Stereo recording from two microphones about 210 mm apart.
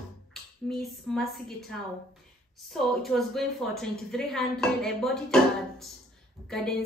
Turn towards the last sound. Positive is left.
turn(degrees=0)  # may be behind; listen again after turning